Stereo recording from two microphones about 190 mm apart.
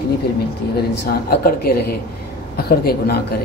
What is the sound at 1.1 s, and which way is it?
A woman's voice, 55° left (ahead or behind).